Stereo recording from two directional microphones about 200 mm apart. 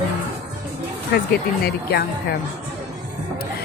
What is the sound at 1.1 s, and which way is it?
Speech, 55° left (ahead or behind).